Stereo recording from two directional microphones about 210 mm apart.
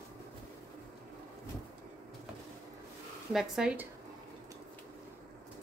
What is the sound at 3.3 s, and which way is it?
Speech, centre (ahead or behind).